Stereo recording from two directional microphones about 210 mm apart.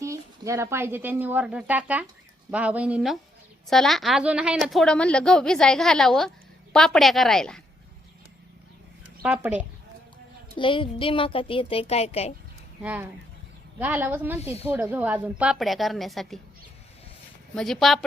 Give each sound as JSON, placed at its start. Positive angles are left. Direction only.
{"t": 0.0, "sound": "a woman's voice", "side_deg": -15}
{"t": 9.2, "sound": "a woman's voice", "side_deg": -5}
{"t": 10.6, "sound": "a woman's voice", "side_deg": 25}
{"t": 12.8, "sound": "a woman's voice", "side_deg": -10}
{"t": 14.4, "sound": "a woman's voice", "side_deg": 30}
{"t": 14.7, "sound": "a woman's voice", "side_deg": -10}
{"t": 17.5, "sound": "a woman's voice", "side_deg": 0}